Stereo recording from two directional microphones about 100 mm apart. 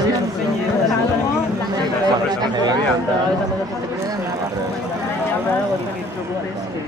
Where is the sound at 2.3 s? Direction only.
45° right (ahead or behind).